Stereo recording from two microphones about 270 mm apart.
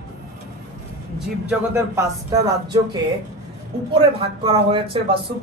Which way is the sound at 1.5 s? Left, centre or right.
Centre.